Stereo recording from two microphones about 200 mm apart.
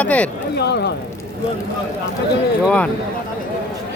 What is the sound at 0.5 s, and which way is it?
Speech, 55° left (ahead or behind).